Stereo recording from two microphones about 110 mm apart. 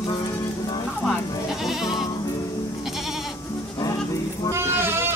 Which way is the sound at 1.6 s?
5° right (ahead or behind).